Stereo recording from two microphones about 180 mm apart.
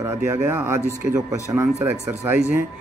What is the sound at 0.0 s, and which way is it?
Speech, 15° right (ahead or behind).